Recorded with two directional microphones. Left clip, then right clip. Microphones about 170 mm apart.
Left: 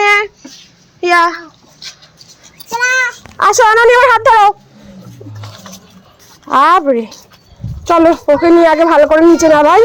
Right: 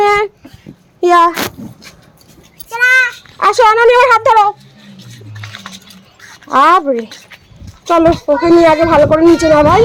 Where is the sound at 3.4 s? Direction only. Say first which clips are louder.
Left 1 dB; 10° left (ahead or behind).